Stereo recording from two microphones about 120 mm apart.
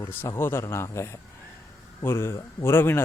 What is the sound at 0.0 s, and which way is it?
Speech, 20° left (ahead or behind).